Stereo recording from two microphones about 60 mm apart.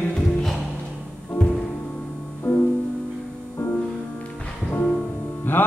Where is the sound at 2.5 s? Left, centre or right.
Left.